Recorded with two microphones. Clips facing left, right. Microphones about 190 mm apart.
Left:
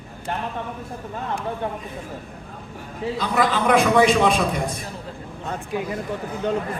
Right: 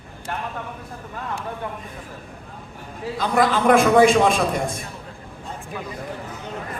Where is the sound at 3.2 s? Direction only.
45° right (ahead or behind).